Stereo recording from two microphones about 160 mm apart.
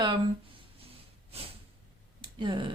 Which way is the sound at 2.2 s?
30° right (ahead or behind).